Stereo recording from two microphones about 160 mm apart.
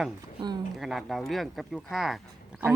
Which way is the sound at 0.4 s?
25° right (ahead or behind).